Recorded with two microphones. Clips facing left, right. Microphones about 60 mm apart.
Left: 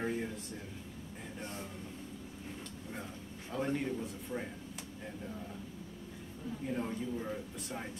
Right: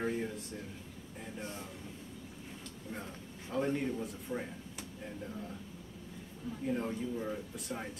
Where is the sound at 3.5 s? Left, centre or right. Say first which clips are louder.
Right 2 dB; centre.